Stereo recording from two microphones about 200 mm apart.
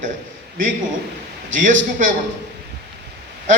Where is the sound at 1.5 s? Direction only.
40° right (ahead or behind).